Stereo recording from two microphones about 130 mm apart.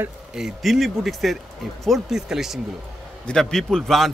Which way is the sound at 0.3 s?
5° right (ahead or behind).